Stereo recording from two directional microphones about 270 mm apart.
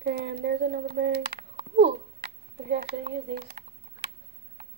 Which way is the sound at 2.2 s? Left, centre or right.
Right.